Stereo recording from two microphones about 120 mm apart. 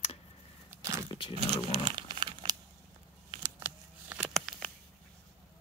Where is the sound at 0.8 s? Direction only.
25° right (ahead or behind).